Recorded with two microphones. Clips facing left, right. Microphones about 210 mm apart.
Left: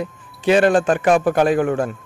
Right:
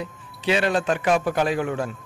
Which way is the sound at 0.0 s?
50° left (ahead or behind).